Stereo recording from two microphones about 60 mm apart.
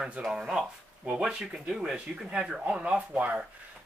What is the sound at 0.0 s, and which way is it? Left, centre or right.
Speech, right.